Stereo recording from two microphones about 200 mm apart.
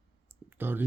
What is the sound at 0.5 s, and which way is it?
Speech, 10° right (ahead or behind).